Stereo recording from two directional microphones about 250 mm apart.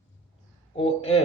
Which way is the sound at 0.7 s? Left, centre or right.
Left.